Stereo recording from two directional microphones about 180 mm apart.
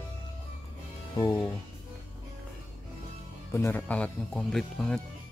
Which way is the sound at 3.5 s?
10° left (ahead or behind).